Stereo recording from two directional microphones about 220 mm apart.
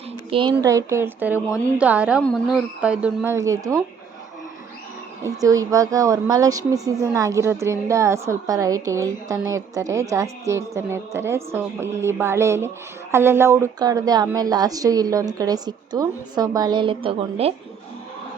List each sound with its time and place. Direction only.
0.3 s a woman's voice: 25° right (ahead or behind)
5.2 s a woman's voice: 15° right (ahead or behind)